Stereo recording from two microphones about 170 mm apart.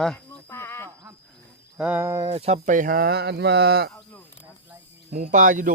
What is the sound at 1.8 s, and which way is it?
Speech, 10° right (ahead or behind).